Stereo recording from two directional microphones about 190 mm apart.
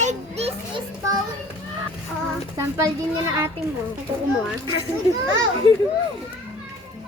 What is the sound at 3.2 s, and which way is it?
Speech, 15° right (ahead or behind).